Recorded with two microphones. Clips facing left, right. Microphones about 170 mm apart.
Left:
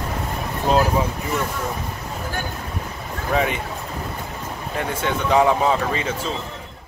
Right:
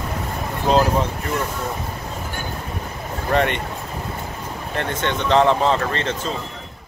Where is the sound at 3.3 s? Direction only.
Centre (ahead or behind).